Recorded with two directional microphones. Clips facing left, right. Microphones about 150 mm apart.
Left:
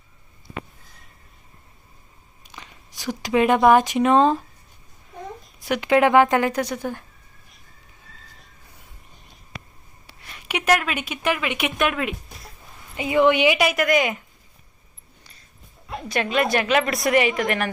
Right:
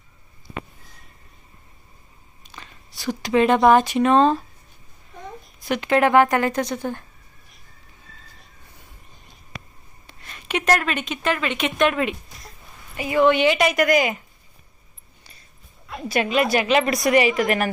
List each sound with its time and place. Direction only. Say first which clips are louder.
2.4 s speech: even; 15° left (ahead or behind)
5.5 s speech: left 1 dB; 15° left (ahead or behind)
10.1 s a woman's voice: right 3 dB; 10° left (ahead or behind)
13.0 s speech: even; 20° left (ahead or behind); by 14.2 s centre (ahead or behind)
16.0 s a woman's voice: right 2 dB; 5° right (ahead or behind)